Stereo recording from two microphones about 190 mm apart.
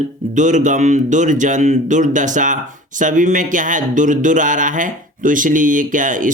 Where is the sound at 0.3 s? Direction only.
40° right (ahead or behind).